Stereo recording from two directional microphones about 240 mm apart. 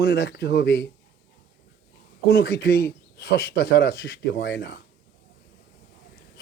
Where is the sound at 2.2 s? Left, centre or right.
Left.